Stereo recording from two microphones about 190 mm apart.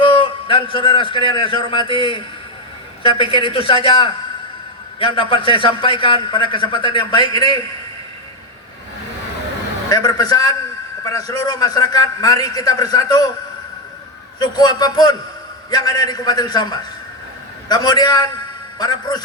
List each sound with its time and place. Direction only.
0.0 s a man's voice: 25° left (ahead or behind)
9.9 s a man's voice: 20° left (ahead or behind)
14.3 s a man's voice: 20° left (ahead or behind)